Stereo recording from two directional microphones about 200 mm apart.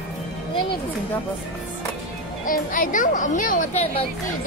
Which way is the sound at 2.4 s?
45° left (ahead or behind).